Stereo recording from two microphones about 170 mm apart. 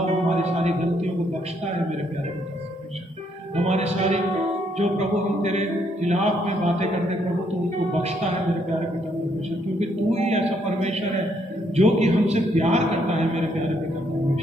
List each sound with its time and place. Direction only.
3.6 s speech: 40° right (ahead or behind)
5.4 s a man's voice: 40° right (ahead or behind)
9.8 s a man's voice: 40° right (ahead or behind)